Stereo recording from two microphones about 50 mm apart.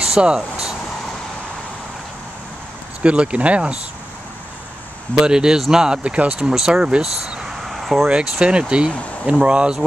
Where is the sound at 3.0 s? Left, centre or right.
Right.